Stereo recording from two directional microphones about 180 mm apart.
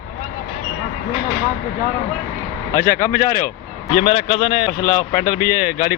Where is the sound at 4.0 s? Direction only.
30° left (ahead or behind).